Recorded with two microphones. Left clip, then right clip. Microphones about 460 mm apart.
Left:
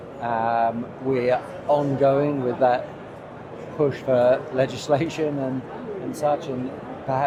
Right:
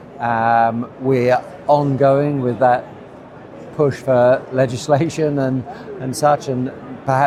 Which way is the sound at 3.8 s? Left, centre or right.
Right.